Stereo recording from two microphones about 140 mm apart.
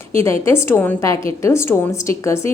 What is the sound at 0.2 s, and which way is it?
A woman's voice, 20° left (ahead or behind).